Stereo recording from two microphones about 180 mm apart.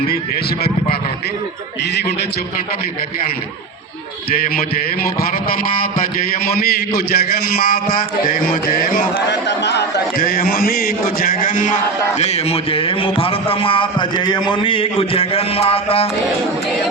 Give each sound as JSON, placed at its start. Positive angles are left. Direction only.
{"t": 4.3, "sound": "a man's voice", "side_deg": 55}
{"t": 6.4, "sound": "a man's voice", "side_deg": 55}
{"t": 9.3, "sound": "a man's voice", "side_deg": 75}